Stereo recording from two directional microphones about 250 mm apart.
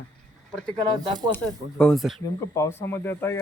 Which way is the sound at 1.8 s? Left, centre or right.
Centre.